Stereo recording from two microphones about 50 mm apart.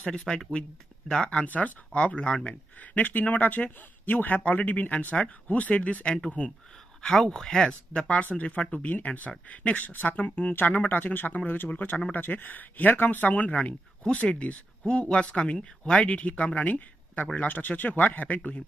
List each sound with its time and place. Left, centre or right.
0.2 s speech: centre
0.5 s speech: centre
7.0 s speech: centre
16.1 s speech: left